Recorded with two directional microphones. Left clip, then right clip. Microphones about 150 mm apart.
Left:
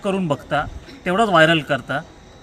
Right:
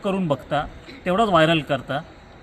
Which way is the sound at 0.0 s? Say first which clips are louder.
Left 2 dB; 15° left (ahead or behind).